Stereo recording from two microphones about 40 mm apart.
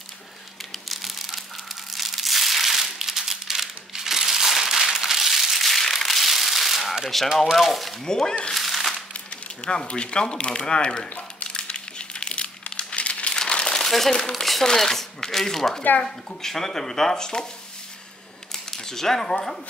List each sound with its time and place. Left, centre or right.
0.7 s a sound: centre
1.9 s crumpling: centre
7.5 s speech: centre
8.0 s speech: centre
8.5 s crumpling: centre
9.1 s speech: left
11.1 s speech: left
11.4 s crumpling: left
13.3 s crumpling: centre
13.8 s speech: centre
18.5 s speech: centre